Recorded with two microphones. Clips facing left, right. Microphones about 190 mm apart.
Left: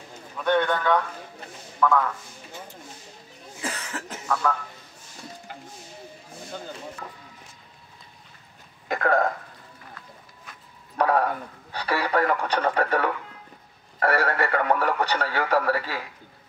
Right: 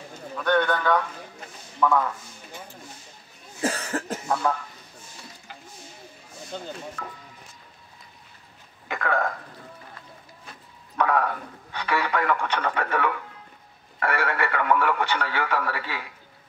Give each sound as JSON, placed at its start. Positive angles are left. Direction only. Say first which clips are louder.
{"t": 0.4, "sound": "a man's voice", "louder": "even", "side_deg": 0}
{"t": 3.6, "sound": "cough", "louder": "right 6 dB", "side_deg": -35}
{"t": 4.3, "sound": "speech", "louder": "even", "side_deg": -25}
{"t": 8.8, "sound": "speech", "louder": "left 4 dB", "side_deg": 40}
{"t": 11.0, "sound": "speech", "louder": "left 1 dB", "side_deg": 35}